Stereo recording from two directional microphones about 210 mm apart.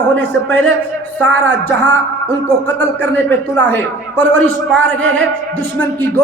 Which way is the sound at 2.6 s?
10° left (ahead or behind).